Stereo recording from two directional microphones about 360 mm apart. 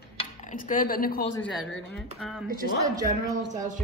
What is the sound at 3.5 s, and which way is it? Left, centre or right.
Speech, right.